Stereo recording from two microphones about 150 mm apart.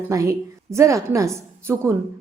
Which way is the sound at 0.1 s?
20° right (ahead or behind).